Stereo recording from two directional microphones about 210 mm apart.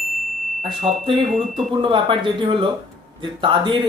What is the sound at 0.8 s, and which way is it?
Speech, 25° right (ahead or behind).